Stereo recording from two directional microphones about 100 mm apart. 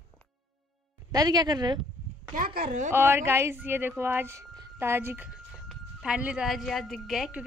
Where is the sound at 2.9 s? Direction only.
25° right (ahead or behind).